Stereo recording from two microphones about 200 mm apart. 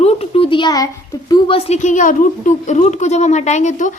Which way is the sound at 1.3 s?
25° left (ahead or behind).